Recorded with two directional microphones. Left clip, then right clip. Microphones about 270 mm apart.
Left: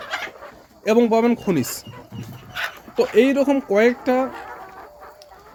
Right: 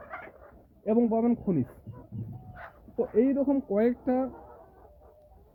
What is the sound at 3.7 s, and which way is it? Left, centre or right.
Speech, centre.